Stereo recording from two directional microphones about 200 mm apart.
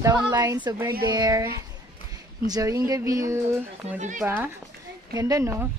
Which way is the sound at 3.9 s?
40° right (ahead or behind).